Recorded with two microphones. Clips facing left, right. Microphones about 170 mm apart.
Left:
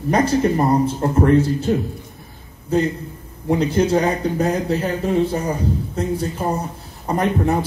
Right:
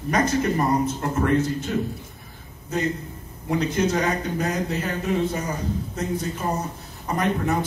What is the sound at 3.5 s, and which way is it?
Speech, 30° left (ahead or behind).